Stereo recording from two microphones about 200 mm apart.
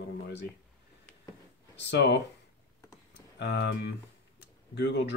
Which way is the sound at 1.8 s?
60° left (ahead or behind).